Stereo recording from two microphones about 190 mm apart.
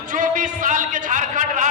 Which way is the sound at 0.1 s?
45° right (ahead or behind).